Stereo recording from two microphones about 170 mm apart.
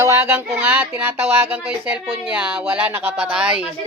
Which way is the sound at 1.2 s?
35° right (ahead or behind).